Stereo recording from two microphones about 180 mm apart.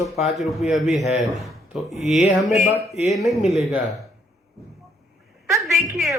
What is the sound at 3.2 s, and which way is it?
Speech, centre (ahead or behind).